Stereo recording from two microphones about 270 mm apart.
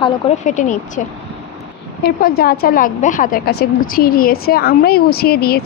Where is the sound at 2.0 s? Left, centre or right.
Left.